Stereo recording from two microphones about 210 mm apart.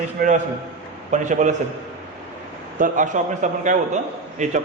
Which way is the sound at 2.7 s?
40° right (ahead or behind).